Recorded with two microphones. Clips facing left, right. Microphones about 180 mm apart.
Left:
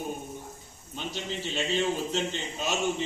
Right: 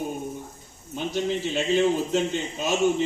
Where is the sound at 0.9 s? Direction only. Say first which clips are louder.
Right 9 dB; 45° right (ahead or behind).